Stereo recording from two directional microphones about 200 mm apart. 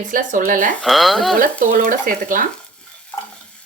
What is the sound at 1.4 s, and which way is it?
Speech, 45° right (ahead or behind).